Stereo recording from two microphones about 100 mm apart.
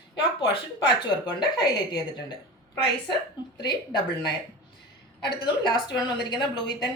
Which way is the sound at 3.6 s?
45° left (ahead or behind).